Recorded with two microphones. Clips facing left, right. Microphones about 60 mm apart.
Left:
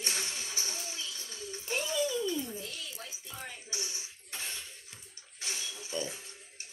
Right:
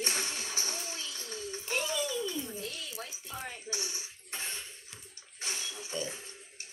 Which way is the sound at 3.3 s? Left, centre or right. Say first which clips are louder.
Right 3 dB; right.